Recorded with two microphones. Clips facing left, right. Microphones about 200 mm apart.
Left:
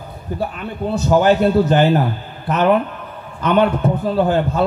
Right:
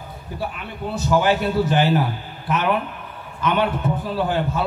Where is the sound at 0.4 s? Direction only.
45° left (ahead or behind).